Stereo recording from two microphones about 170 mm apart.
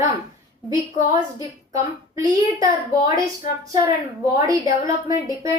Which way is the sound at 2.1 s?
20° right (ahead or behind).